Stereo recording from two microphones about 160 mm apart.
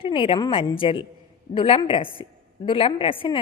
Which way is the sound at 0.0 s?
35° left (ahead or behind).